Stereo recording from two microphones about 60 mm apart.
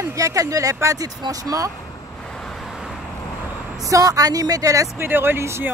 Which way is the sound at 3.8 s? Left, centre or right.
Right.